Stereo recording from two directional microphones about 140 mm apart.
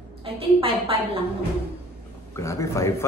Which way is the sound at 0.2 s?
40° right (ahead or behind).